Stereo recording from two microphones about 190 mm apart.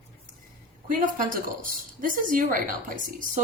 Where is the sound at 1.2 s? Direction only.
45° right (ahead or behind).